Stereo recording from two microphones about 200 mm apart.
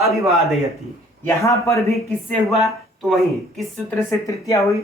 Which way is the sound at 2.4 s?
Centre (ahead or behind).